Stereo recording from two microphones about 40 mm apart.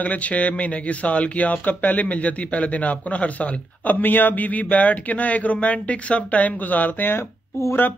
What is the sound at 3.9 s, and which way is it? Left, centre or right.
Speech, left.